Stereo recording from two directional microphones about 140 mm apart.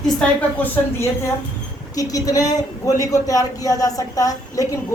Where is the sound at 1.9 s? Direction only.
25° left (ahead or behind).